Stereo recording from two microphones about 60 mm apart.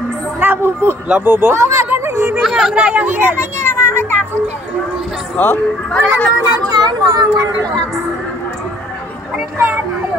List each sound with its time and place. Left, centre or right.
0.4 s a sound: right
1.0 s speech: right
1.5 s speech: right
2.1 s chatter: right
2.4 s chatter: centre
2.7 s speech: centre
3.3 s music: left
5.4 s speech: left
5.9 s speech: centre
6.8 s speech: right